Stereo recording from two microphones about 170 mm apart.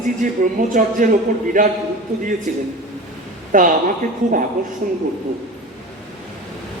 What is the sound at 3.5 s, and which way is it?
Speech, 55° right (ahead or behind).